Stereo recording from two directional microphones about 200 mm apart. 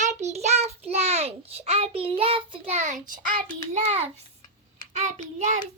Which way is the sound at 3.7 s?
35° right (ahead or behind).